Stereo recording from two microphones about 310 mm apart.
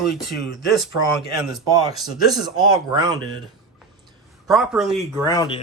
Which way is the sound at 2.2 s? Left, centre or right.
Centre.